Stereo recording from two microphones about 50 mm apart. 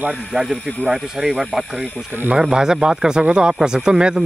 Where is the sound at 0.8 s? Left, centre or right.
Centre.